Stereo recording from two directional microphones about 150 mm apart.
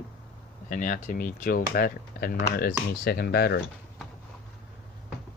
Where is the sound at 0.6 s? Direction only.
60° left (ahead or behind); by 3.5 s 90° left.